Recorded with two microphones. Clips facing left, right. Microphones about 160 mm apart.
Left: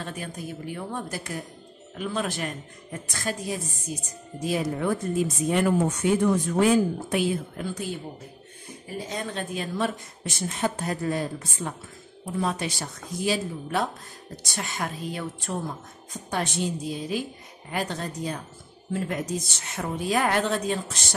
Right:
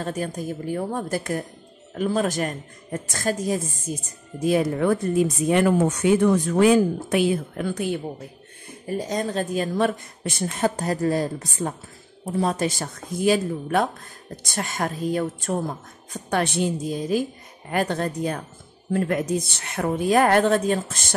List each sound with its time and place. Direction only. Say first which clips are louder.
0.0 s speech: right 7 dB; 40° right (ahead or behind)
4.5 s speech: right 6 dB; 60° right (ahead or behind)
5.5 s speech: right 3 dB; 80° right; by 8.0 s 65° right (ahead or behind)
8.8 s speech: right 7 dB; 40° right (ahead or behind)
10.8 s speech: right 5 dB; 40° right (ahead or behind)
16.1 s speech: right 5 dB; 65° right (ahead or behind)
16.8 s speech: right 6 dB; 45° right (ahead or behind)